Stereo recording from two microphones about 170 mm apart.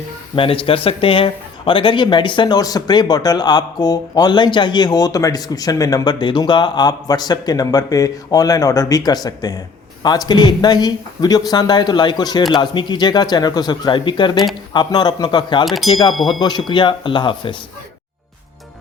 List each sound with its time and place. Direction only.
0.3 s a man's voice: 30° left (ahead or behind)
15.6 s speech: centre (ahead or behind)
15.9 s a man's voice: 25° left (ahead or behind)